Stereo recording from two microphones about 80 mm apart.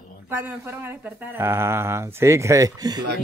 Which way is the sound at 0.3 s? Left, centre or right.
Right.